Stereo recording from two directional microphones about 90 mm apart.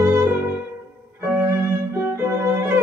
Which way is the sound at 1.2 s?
20° right (ahead or behind).